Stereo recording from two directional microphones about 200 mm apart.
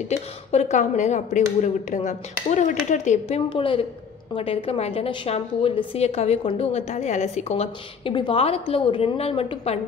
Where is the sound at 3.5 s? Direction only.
25° left (ahead or behind).